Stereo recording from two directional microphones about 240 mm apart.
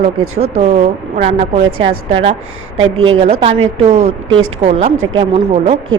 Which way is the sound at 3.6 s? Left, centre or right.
Right.